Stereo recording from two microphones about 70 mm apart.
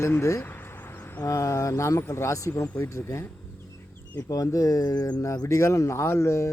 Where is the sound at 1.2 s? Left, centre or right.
Left.